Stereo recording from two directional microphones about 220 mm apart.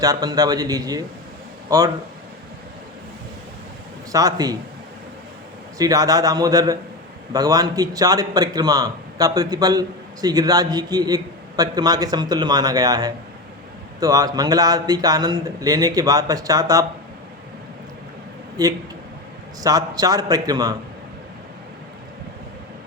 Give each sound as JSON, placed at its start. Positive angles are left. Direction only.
{"t": 0.0, "sound": "a man's voice", "side_deg": -15}
{"t": 4.1, "sound": "a man's voice", "side_deg": -15}
{"t": 5.7, "sound": "a man's voice", "side_deg": -15}
{"t": 18.6, "sound": "a man's voice", "side_deg": -15}